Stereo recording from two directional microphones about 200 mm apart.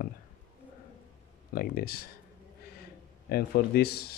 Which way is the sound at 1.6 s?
50° left (ahead or behind).